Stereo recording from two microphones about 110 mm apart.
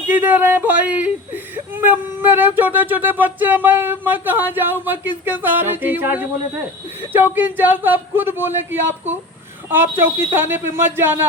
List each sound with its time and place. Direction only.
0.1 s speech: 15° right (ahead or behind)
10.3 s speech: 20° right (ahead or behind)